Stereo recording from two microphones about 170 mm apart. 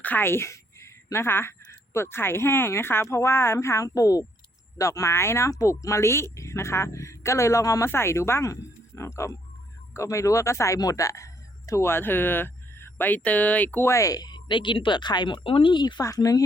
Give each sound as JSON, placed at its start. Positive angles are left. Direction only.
{"t": 0.0, "sound": "speech", "side_deg": 10}